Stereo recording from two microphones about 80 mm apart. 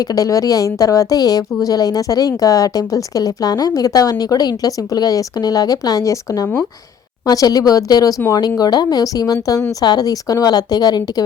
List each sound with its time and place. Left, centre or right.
0.0 s a woman's voice: left
7.3 s a woman's voice: left